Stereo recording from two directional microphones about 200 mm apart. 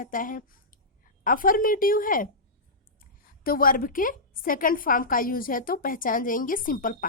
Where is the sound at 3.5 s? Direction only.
45° left (ahead or behind).